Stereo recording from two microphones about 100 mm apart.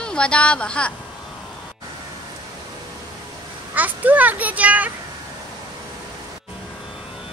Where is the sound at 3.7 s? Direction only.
15° right (ahead or behind).